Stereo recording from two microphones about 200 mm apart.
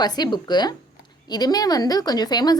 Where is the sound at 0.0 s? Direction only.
20° left (ahead or behind).